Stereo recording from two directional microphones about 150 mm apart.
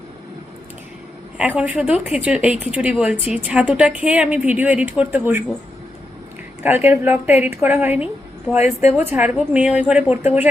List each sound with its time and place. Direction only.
1.4 s a woman's voice: 5° right (ahead or behind)
6.6 s a woman's voice: 15° right (ahead or behind)
8.6 s a woman's voice: 45° left (ahead or behind)
9.0 s a woman's voice: 15° right (ahead or behind)